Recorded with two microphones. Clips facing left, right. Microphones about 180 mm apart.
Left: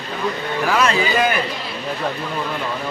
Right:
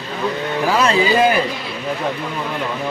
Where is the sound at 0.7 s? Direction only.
30° right (ahead or behind).